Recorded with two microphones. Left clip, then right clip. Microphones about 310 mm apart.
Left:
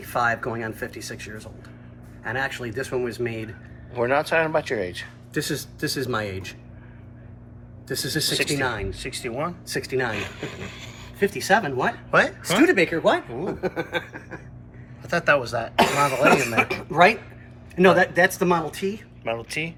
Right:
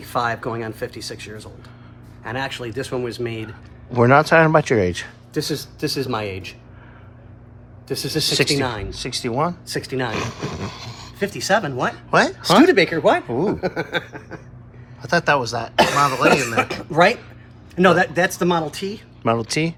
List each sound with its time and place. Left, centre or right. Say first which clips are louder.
0.0 s speech: right 1 dB; right
5.3 s speech: right 3 dB; centre
7.9 s speech: right 4 dB; centre
11.2 s speech: right 1 dB; right
12.1 s speech: right 4 dB; centre
12.6 s speech: right 4 dB; right
15.0 s speech: right 3 dB; centre
15.8 s speech: right 3 dB; right